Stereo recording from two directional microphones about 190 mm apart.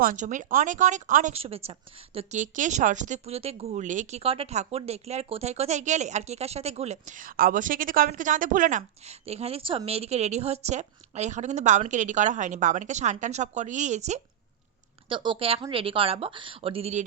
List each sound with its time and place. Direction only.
0.0 s speech: 45° right (ahead or behind)
15.1 s speech: 25° right (ahead or behind)